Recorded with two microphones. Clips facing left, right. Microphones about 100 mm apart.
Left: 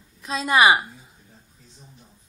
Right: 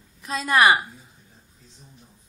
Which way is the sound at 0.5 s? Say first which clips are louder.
Left 1 dB; 10° left (ahead or behind).